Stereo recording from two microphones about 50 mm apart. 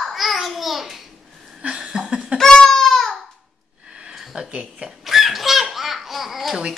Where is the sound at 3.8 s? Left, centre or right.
Centre.